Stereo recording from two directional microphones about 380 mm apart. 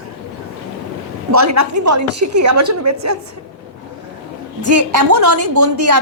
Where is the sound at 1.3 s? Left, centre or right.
Right.